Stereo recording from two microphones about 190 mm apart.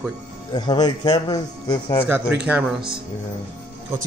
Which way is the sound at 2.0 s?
10° right (ahead or behind).